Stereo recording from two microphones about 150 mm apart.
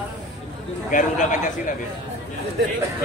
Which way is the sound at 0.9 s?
60° left (ahead or behind).